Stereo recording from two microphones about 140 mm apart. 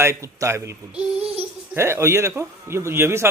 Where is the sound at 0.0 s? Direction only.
20° right (ahead or behind).